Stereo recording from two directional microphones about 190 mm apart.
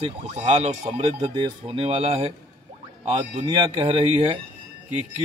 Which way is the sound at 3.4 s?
25° right (ahead or behind).